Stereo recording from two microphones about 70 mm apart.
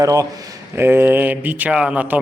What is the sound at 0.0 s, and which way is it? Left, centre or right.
Speech, right.